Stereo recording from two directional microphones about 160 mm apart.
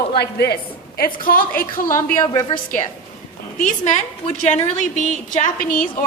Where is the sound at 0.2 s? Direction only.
90° left; by 2.0 s 60° left (ahead or behind).